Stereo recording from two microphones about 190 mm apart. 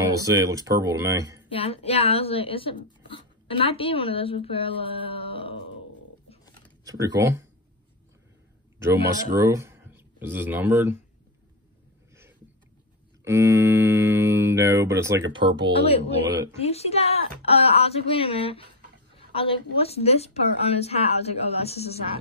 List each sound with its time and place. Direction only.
0.0 s speech: 15° right (ahead or behind)
1.5 s speech: 30° left (ahead or behind)
6.8 s speech: 20° right (ahead or behind)
9.3 s speech: 15° right (ahead or behind)
13.2 s speech: 15° right (ahead or behind)
15.8 s a woman's voice: 30° left (ahead or behind)